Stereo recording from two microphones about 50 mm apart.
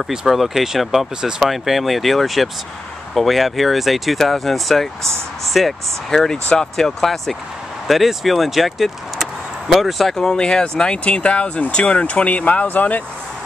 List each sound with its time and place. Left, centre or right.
0.0 s speech: centre
6.3 s speech: centre
6.8 s speech: centre
10.1 s speech: centre; by 13.0 s left